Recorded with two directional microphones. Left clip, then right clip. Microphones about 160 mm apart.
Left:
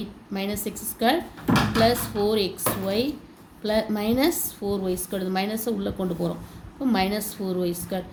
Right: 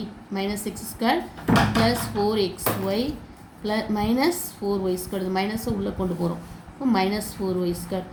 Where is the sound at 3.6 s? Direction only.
40° left (ahead or behind).